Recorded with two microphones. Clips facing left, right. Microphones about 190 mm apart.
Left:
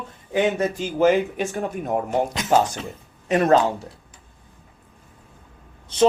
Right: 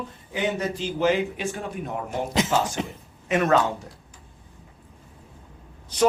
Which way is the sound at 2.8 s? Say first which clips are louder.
Right 3 dB; 20° right (ahead or behind).